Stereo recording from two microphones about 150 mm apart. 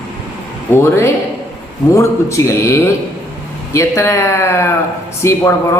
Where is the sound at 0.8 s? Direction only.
15° left (ahead or behind).